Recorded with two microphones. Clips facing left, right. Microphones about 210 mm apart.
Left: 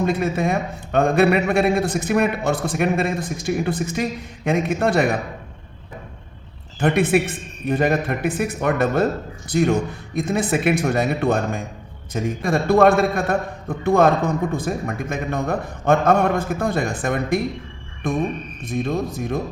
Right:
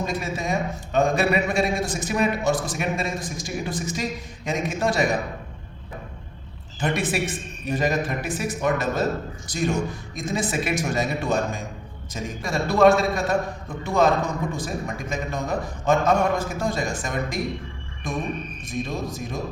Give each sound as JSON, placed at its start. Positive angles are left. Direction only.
{"t": 0.0, "sound": "a man's voice", "side_deg": 55}
{"t": 6.7, "sound": "a man's voice", "side_deg": 55}